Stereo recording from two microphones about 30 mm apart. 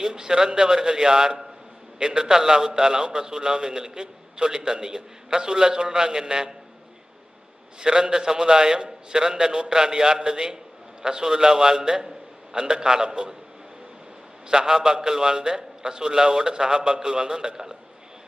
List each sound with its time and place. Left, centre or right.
0.0 s a man's voice: right
7.8 s a man's voice: right
14.5 s a man's voice: right